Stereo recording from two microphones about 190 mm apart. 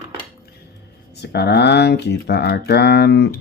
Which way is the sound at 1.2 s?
60° left (ahead or behind).